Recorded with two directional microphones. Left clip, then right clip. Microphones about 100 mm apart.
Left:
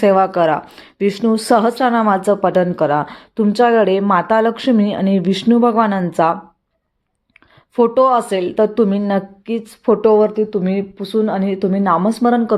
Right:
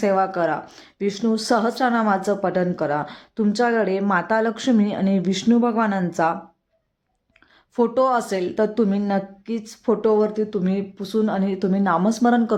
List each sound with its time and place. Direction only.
0.0 s a woman's voice: 25° left (ahead or behind); by 6.3 s 10° left (ahead or behind)
7.9 s a woman's voice: centre (ahead or behind)